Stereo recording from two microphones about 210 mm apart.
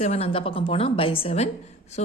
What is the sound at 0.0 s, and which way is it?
A woman's voice, 30° left (ahead or behind).